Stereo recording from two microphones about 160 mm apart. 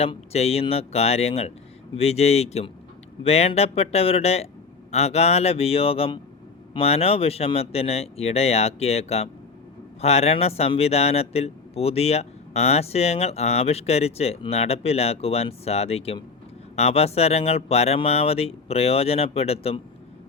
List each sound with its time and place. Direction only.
0.0 s speech: 40° left (ahead or behind)